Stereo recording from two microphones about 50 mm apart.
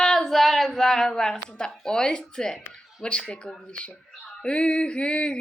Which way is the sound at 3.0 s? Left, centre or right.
Centre.